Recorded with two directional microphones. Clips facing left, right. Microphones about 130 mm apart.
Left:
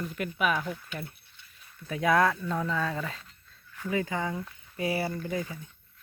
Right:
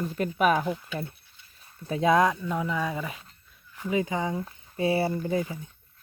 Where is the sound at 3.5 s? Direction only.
20° right (ahead or behind).